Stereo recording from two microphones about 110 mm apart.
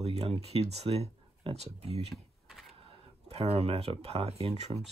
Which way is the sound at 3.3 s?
65° right (ahead or behind).